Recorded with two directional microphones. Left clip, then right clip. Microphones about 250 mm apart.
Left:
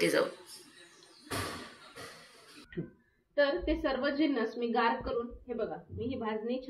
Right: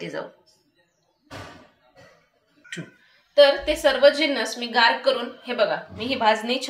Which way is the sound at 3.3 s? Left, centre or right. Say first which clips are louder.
Right 13 dB; right.